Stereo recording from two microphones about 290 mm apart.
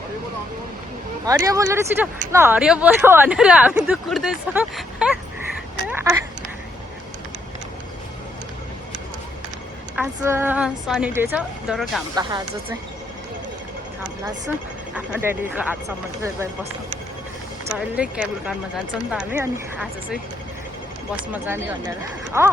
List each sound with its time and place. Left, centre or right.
1.3 s speech: centre
5.9 s a sound: centre
9.9 s speech: centre
12.1 s speech: centre
14.9 s speech: centre
17.7 s speech: centre
22.3 s speech: centre